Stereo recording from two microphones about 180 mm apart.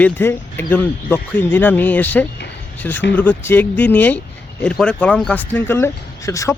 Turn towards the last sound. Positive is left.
turn(degrees=15)  # may be behind; listen again after turning